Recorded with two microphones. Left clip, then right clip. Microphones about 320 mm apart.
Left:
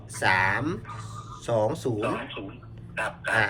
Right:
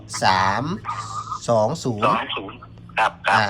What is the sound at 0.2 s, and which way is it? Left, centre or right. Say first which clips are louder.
Speech: right 5 dB; centre.